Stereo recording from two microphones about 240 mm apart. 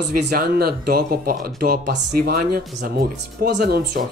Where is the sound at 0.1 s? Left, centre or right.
Right.